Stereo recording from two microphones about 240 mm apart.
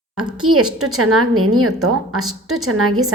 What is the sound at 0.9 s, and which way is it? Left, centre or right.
A woman's voice, right.